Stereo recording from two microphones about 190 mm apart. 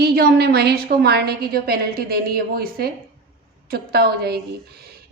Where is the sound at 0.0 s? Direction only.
55° right (ahead or behind).